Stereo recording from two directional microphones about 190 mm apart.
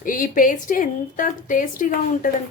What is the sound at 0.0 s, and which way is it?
A woman's voice, 45° left (ahead or behind).